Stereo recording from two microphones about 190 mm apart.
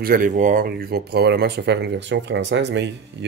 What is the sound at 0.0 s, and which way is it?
Speech, 45° right (ahead or behind).